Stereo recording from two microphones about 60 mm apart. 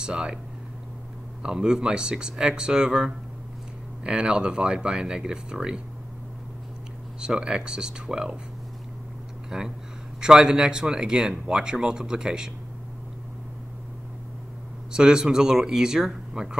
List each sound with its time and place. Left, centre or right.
0.0 s speech: centre
1.4 s speech: centre
7.2 s speech: centre
9.5 s speech: centre
14.9 s speech: centre